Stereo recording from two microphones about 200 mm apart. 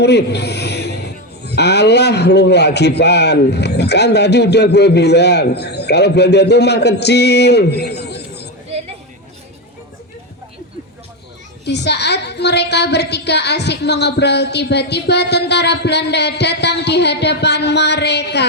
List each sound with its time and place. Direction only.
0.0 s a man's voice: 55° left (ahead or behind)
11.6 s a man's voice: 55° left (ahead or behind)